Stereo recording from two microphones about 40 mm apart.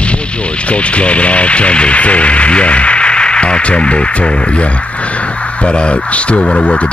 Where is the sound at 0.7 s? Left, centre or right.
Left.